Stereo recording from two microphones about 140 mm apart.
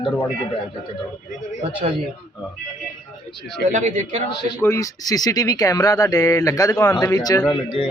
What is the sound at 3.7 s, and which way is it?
Speech, 60° right (ahead or behind).